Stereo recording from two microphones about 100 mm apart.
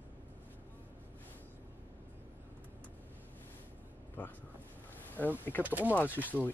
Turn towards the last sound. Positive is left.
turn(degrees=15)  # may be behind; listen again after turning